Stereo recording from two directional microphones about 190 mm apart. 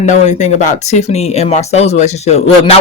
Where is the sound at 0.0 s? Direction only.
40° left (ahead or behind).